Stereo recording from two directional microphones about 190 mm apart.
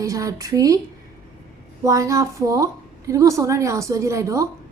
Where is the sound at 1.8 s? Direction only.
15° right (ahead or behind).